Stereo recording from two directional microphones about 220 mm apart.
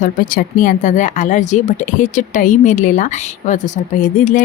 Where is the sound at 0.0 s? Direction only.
40° left (ahead or behind).